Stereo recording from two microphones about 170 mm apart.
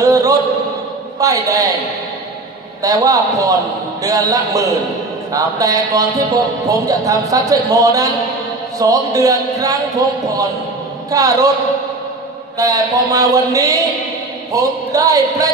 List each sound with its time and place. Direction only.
0.0 s a sound: 20° right (ahead or behind)
1.2 s a man's voice: 20° right (ahead or behind)
2.8 s a man's voice: 20° right (ahead or behind)
12.5 s a man's voice: 20° right (ahead or behind)